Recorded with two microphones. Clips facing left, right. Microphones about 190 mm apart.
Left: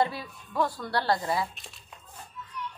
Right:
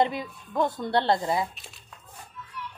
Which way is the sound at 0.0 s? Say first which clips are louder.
Right 3 dB; 20° right (ahead or behind).